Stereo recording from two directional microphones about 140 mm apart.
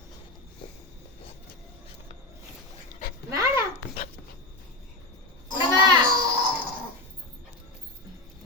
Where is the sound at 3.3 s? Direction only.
20° right (ahead or behind).